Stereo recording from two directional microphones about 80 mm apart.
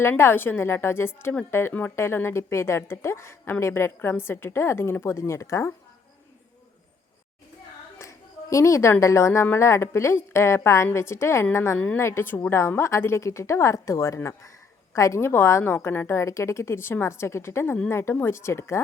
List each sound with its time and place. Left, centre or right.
0.0 s a woman's voice: left
7.9 s a woman's voice: left